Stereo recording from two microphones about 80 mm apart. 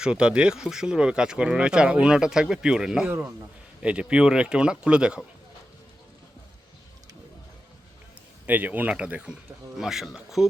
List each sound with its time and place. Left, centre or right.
0.0 s speech: centre
3.1 s a man's voice: right
3.8 s speech: centre
8.4 s speech: right; by 10.4 s centre